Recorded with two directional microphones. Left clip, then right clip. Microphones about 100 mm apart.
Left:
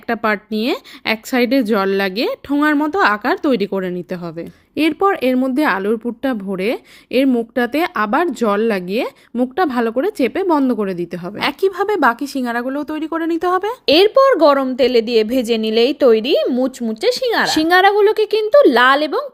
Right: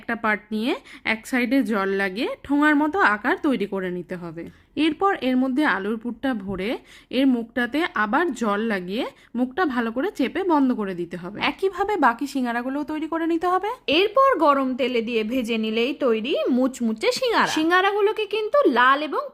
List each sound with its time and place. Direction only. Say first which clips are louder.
0.1 s a woman's voice: left 6 dB; 35° left (ahead or behind)
2.5 s a woman's voice: left 2 dB; 25° left (ahead or behind); by 16.5 s 40° left (ahead or behind)
16.9 s speech: left 5 dB; 15° left (ahead or behind)
17.4 s a woman's voice: left 9 dB; 35° left (ahead or behind)